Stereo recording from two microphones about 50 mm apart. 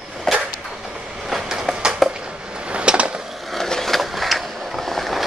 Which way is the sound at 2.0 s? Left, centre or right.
Centre.